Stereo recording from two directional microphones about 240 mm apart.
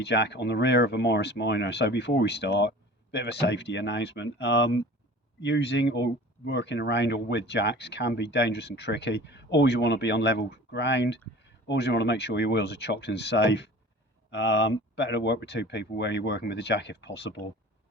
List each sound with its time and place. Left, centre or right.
0.0 s speech: left